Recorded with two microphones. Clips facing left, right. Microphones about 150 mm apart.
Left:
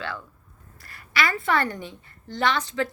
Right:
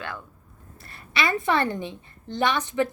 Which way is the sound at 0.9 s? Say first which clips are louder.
Even; 25° right (ahead or behind).